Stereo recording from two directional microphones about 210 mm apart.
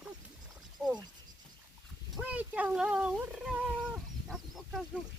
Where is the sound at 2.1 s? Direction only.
5° right (ahead or behind).